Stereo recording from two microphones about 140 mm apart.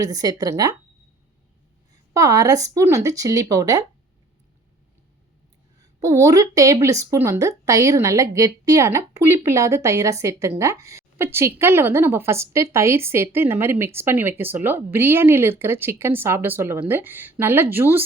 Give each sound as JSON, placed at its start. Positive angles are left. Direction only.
{"t": 0.0, "sound": "a woman's voice", "side_deg": -25}
{"t": 2.1, "sound": "a woman's voice", "side_deg": -25}
{"t": 5.8, "sound": "a woman's voice", "side_deg": -25}